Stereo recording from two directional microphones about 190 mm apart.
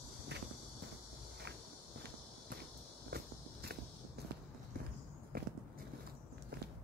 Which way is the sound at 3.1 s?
55° right (ahead or behind).